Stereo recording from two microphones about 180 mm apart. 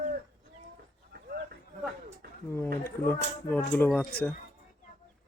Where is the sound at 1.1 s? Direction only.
60° right (ahead or behind).